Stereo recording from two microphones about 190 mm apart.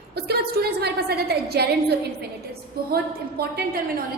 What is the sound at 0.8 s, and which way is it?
Speech, 55° right (ahead or behind).